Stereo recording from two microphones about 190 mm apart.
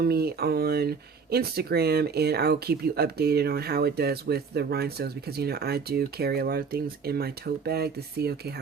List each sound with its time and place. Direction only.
0.0 s speech: 55° right (ahead or behind)